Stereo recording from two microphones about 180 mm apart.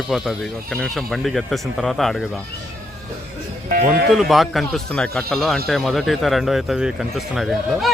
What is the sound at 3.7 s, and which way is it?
Speech, 50° right (ahead or behind).